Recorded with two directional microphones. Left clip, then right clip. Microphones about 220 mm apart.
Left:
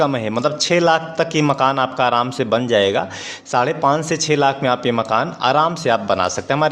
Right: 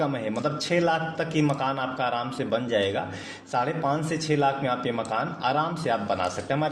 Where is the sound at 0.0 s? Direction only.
45° left (ahead or behind).